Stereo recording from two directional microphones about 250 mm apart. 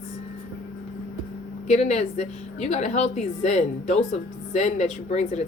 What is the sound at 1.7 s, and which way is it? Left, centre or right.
A woman's voice, left.